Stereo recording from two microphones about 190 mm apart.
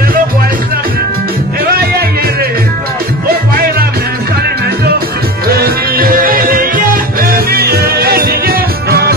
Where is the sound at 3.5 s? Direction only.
50° right (ahead or behind).